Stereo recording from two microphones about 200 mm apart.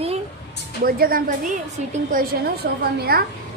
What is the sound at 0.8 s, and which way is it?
Speech, 45° right (ahead or behind).